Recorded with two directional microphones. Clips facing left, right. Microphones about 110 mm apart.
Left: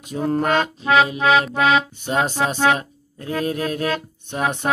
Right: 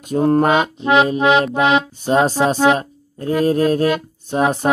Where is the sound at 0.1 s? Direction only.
45° right (ahead or behind).